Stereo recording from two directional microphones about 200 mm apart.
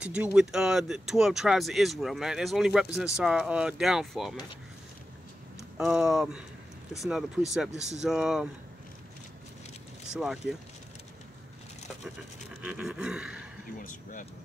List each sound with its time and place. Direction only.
0.0 s speech: 5° right (ahead or behind)
5.8 s speech: 5° right (ahead or behind)
10.1 s speech: centre (ahead or behind)
12.6 s speech: 5° right (ahead or behind)
13.7 s speech: 40° left (ahead or behind)